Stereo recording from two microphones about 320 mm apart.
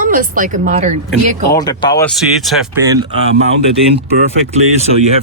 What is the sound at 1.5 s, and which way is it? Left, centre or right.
Speech, centre.